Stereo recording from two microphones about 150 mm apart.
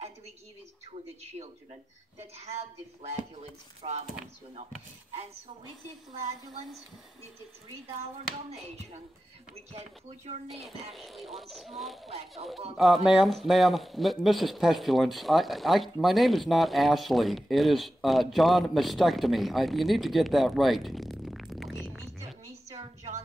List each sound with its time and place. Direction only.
1.3 s speech: 40° right (ahead or behind)
3.0 s speech: 45° right (ahead or behind)
9.7 s speech: 45° right (ahead or behind)
10.5 s speech: centre (ahead or behind)
12.1 s speech: 45° right (ahead or behind)
12.7 s speech: centre (ahead or behind)